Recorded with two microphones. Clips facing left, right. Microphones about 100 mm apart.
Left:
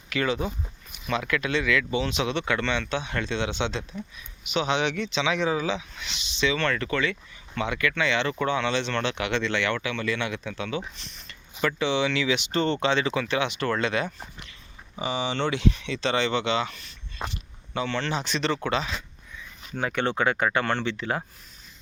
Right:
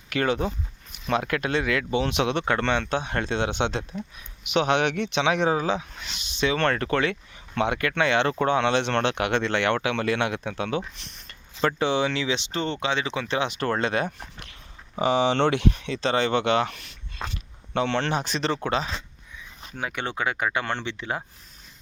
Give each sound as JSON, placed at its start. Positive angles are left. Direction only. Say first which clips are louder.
{"t": 0.1, "sound": "speech", "louder": "right 2 dB", "side_deg": -50}
{"t": 11.8, "sound": "speech", "louder": "left 1 dB", "side_deg": -45}
{"t": 12.5, "sound": "speech", "louder": "left 3 dB", "side_deg": -15}
{"t": 13.2, "sound": "speech", "louder": "even", "side_deg": -30}
{"t": 14.9, "sound": "speech", "louder": "right 7 dB", "side_deg": -75}
{"t": 19.7, "sound": "speech", "louder": "left 4 dB", "side_deg": -10}